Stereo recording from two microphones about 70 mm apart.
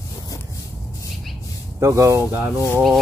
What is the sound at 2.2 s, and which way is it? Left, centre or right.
Speech, right.